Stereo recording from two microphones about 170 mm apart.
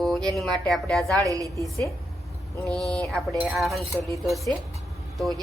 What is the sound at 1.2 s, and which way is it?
Speech, 20° right (ahead or behind).